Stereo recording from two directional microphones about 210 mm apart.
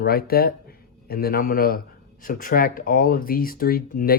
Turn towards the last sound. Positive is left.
turn(degrees=40)  # may be behind; listen again after turning